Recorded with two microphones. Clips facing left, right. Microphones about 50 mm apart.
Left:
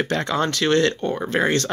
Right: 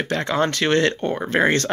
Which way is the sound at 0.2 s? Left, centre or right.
Centre.